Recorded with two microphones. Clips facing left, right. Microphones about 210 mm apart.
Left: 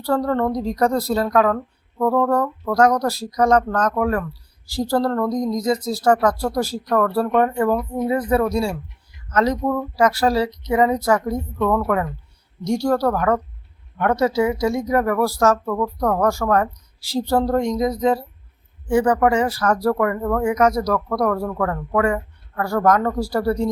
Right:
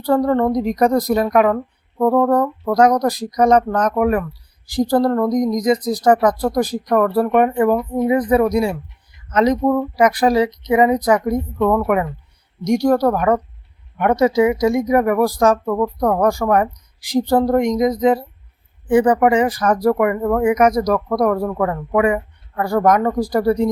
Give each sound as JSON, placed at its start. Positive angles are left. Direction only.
{"t": 0.0, "sound": "speech", "side_deg": -15}